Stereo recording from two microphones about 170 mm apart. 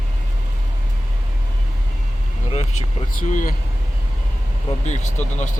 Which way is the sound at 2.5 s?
40° left (ahead or behind).